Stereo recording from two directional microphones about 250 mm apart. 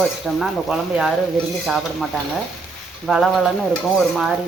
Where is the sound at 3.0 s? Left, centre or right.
Centre.